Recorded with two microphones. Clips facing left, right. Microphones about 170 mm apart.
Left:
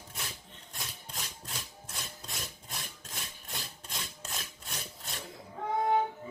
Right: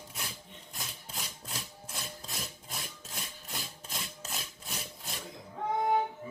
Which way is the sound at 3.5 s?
Centre (ahead or behind).